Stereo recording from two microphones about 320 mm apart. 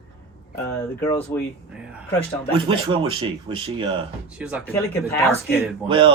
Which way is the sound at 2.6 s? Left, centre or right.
Centre.